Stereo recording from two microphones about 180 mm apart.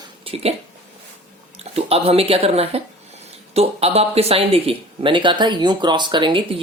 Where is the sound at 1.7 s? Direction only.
35° right (ahead or behind).